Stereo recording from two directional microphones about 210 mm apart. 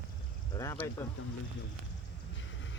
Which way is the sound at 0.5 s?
15° left (ahead or behind).